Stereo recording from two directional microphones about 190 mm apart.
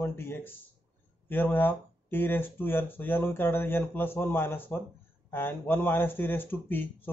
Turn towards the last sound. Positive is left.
turn(degrees=10)  # may be behind; listen again after turning